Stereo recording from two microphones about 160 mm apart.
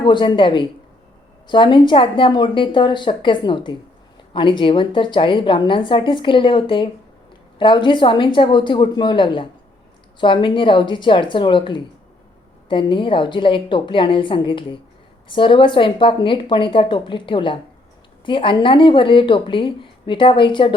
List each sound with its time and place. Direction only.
0.0 s a woman's voice: 30° left (ahead or behind)